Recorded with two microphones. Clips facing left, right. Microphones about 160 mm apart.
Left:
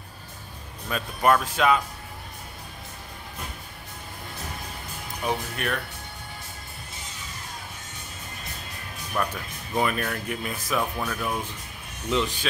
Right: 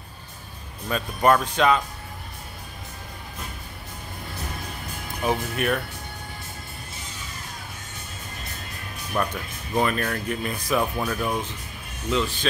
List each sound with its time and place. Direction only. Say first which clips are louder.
0.8 s speech: right 2 dB; centre (ahead or behind)
5.2 s speech: right 4 dB; 5° right (ahead or behind)
9.3 s speech: right 3 dB; 5° left (ahead or behind)
10.8 s speech: right 3 dB; 10° right (ahead or behind)
12.1 s speech: right 1 dB; 15° left (ahead or behind)